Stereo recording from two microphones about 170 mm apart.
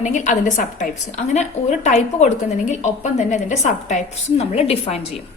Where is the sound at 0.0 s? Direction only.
45° left (ahead or behind).